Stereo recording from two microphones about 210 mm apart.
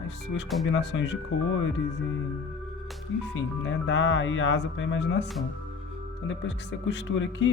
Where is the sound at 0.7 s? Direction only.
60° left (ahead or behind).